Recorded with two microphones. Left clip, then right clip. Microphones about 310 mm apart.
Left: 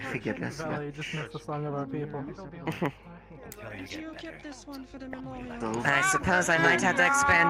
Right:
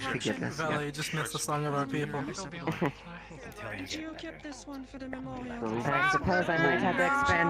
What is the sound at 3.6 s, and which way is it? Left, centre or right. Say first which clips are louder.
Speech: right 2 dB; centre.